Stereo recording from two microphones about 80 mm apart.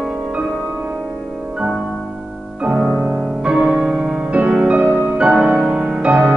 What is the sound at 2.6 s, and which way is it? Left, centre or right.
Music, centre.